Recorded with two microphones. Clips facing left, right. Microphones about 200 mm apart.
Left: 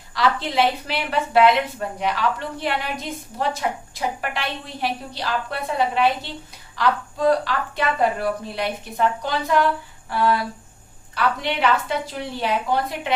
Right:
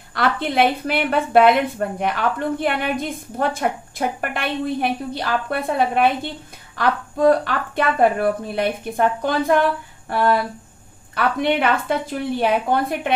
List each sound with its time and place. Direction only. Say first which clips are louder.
0.1 s a woman's voice: right 1 dB; 55° right (ahead or behind)
10.0 s a sound: right 2 dB; 55° right (ahead or behind)
11.1 s a woman's voice: right 4 dB; 50° right (ahead or behind)